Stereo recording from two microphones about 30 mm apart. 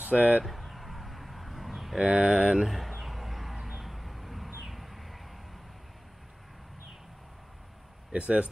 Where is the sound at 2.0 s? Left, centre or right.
Right.